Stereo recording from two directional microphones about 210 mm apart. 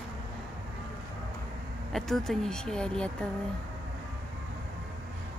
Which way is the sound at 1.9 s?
Centre (ahead or behind).